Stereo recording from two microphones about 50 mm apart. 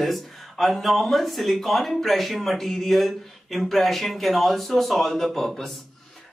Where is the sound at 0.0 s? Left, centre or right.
Centre.